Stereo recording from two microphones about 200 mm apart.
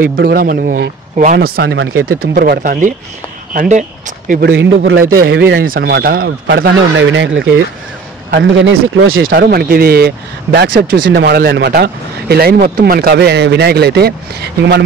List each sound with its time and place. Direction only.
0.0 s speech: 45° right (ahead or behind)
4.5 s speech: 70° right (ahead or behind)
5.0 s a man's voice: 50° right (ahead or behind)
8.3 s speech: 65° right (ahead or behind)
9.3 s speech: 50° right (ahead or behind)